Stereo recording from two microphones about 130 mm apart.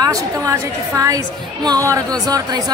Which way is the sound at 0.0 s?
25° right (ahead or behind).